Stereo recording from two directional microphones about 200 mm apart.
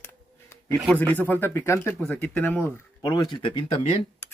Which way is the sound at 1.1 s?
10° left (ahead or behind).